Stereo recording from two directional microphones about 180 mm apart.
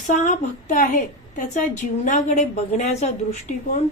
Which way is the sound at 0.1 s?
40° left (ahead or behind).